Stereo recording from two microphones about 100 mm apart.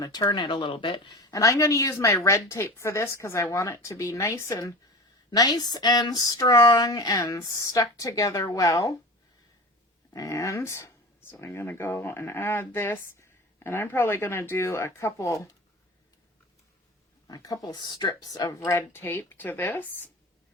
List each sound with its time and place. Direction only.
0.0 s speech: 40° left (ahead or behind); by 1.1 s 60° left (ahead or behind)
1.1 s speech: 35° left (ahead or behind)
5.3 s speech: 40° left (ahead or behind)
10.1 s speech: 35° left (ahead or behind)
17.2 s speech: 35° left (ahead or behind); by 20.1 s 20° left (ahead or behind)